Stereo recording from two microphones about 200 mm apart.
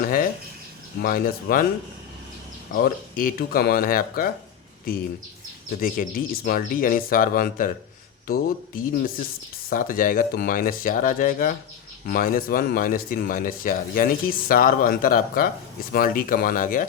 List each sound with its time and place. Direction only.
0.0 s a sound: 45° left (ahead or behind)
1.0 s speech: 45° left (ahead or behind)
2.7 s speech: 45° left (ahead or behind)
5.8 s speech: 45° left (ahead or behind)